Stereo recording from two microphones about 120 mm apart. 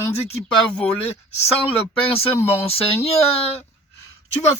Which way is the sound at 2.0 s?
55° left (ahead or behind).